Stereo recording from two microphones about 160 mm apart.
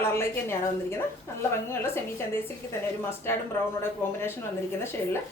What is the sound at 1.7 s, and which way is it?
Speech, 15° left (ahead or behind).